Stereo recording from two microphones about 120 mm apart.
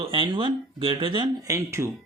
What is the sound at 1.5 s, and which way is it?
Speech, 25° right (ahead or behind).